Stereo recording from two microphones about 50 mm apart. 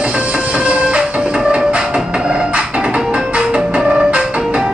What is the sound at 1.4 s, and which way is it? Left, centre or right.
Music, centre.